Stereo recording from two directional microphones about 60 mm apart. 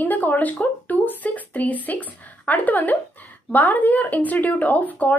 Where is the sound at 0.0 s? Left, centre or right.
Left.